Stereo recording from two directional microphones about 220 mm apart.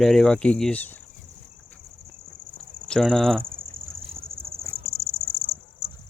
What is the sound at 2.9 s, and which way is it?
Speech, centre (ahead or behind).